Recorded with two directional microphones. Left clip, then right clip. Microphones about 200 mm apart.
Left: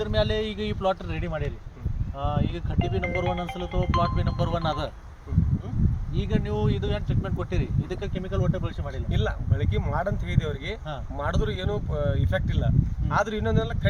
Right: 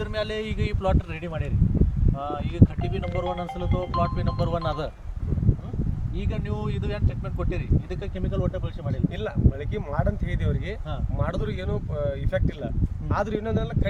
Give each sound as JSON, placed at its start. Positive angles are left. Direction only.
{"t": 0.0, "sound": "speech", "side_deg": -20}
{"t": 6.3, "sound": "speech", "side_deg": -15}